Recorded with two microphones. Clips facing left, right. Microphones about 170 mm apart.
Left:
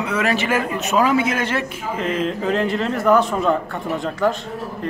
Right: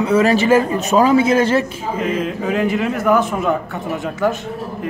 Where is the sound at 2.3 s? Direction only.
5° right (ahead or behind).